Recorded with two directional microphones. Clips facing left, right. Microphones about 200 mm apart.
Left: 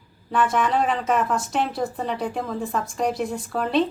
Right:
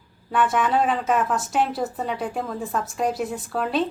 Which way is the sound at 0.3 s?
Centre (ahead or behind).